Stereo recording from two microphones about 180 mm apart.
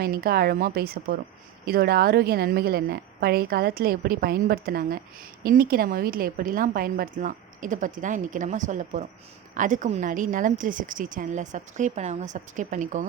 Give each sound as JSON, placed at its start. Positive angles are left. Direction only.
{"t": 0.0, "sound": "a woman's voice", "side_deg": -60}